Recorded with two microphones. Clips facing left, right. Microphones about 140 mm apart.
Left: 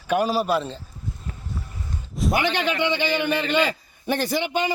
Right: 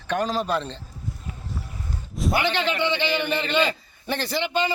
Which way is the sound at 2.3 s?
15° left (ahead or behind).